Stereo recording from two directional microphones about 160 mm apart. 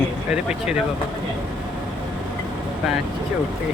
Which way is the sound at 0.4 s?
5° right (ahead or behind).